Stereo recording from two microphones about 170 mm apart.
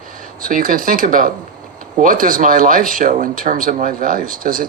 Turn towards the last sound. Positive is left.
turn(degrees=-55)  # may be behind; listen again after turning